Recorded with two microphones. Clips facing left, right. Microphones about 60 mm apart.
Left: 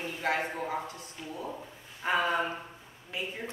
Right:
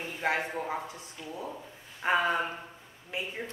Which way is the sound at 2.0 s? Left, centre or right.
Centre.